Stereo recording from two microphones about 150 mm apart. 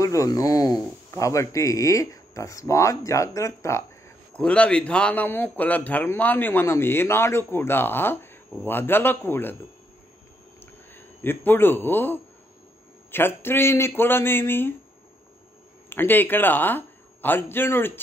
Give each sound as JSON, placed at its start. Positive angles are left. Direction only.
{"t": 0.0, "sound": "a man's voice", "side_deg": 20}
{"t": 4.4, "sound": "a man's voice", "side_deg": 5}
{"t": 10.6, "sound": "a sound", "side_deg": 15}
{"t": 13.1, "sound": "a man's voice", "side_deg": 15}
{"t": 15.9, "sound": "speech", "side_deg": 15}